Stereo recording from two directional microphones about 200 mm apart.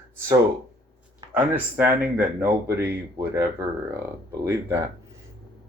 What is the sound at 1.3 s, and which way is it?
Speech, 10° right (ahead or behind).